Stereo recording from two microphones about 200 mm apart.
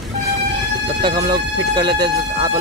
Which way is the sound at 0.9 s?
20° right (ahead or behind).